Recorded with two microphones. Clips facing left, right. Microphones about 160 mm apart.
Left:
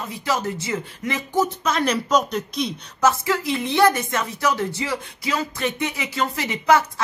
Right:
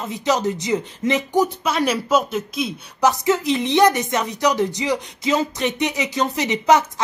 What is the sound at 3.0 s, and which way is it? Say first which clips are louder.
Speech: right 3 dB; 20° right (ahead or behind).